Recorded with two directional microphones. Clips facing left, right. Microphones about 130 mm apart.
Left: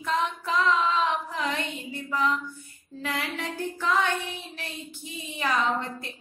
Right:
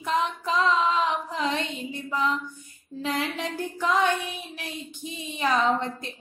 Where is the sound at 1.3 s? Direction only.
20° right (ahead or behind).